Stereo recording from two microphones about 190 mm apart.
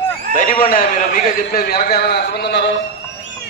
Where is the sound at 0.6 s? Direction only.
45° left (ahead or behind); by 2.7 s 65° left (ahead or behind).